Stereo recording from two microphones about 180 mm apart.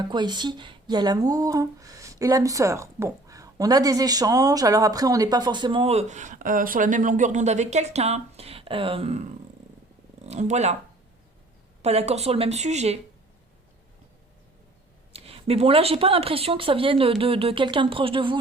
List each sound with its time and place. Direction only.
0.1 s speech: 25° right (ahead or behind)
10.2 s speech: 40° right (ahead or behind)
11.8 s speech: 35° right (ahead or behind)
15.1 s speech: 35° right (ahead or behind)